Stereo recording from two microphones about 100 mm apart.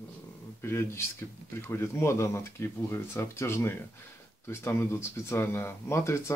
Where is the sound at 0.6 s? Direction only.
25° left (ahead or behind).